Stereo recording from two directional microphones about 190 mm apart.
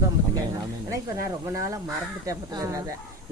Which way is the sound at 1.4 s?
15° right (ahead or behind).